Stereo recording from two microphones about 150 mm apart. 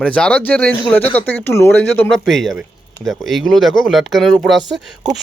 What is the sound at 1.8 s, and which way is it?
Speech, 5° left (ahead or behind).